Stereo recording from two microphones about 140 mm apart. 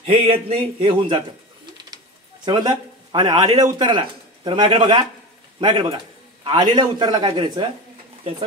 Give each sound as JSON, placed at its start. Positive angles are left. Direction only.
{"t": 0.0, "sound": "speech", "side_deg": -45}
{"t": 2.4, "sound": "speech", "side_deg": -35}